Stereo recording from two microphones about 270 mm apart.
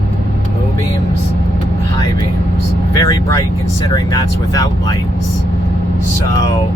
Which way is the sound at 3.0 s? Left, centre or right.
Centre.